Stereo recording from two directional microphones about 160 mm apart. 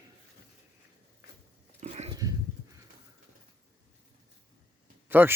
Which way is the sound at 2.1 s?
20° right (ahead or behind).